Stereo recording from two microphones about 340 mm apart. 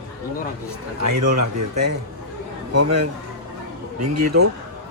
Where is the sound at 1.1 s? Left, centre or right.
Right.